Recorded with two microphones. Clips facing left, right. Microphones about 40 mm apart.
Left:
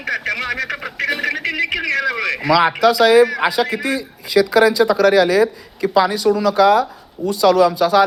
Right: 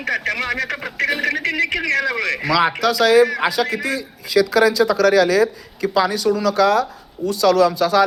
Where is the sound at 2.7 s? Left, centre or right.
Centre.